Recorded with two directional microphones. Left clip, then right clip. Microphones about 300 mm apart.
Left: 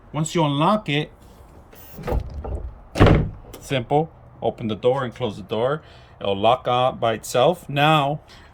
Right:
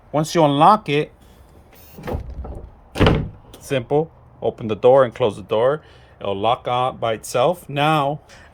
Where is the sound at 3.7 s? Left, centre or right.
Centre.